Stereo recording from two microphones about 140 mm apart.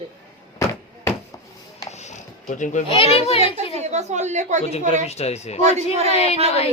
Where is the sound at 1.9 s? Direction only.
55° left (ahead or behind).